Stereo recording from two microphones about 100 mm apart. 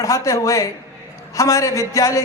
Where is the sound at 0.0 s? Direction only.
35° left (ahead or behind).